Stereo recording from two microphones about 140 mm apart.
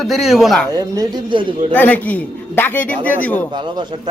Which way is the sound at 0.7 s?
25° right (ahead or behind).